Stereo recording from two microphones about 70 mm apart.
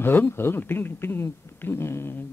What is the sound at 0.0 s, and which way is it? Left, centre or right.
Speech, left.